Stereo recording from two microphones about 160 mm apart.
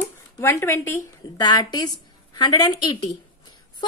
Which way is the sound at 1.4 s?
25° left (ahead or behind).